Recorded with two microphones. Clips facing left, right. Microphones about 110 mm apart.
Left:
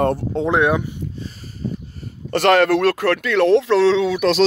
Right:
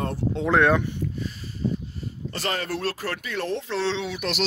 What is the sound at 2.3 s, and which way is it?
Speech, 75° left (ahead or behind).